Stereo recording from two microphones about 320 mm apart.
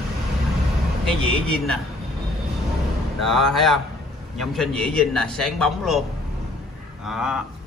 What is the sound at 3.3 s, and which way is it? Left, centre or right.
A man's voice, centre.